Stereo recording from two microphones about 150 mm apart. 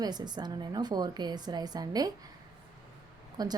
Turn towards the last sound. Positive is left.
turn(degrees=-25)  # may be behind; listen again after turning